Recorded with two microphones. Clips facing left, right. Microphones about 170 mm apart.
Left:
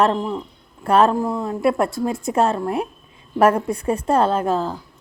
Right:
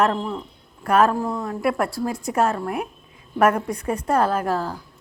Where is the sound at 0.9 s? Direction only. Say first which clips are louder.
Left 2 dB; 30° left (ahead or behind).